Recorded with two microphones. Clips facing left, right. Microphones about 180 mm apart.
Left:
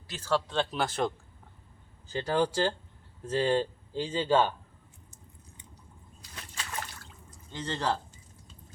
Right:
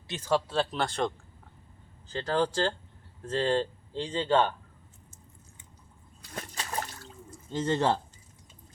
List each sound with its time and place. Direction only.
0.1 s speech: 15° right (ahead or behind); by 1.1 s 5° left (ahead or behind)
2.1 s speech: 10° left (ahead or behind)
6.3 s a sound: 40° right (ahead or behind)
7.6 s speech: 25° right (ahead or behind)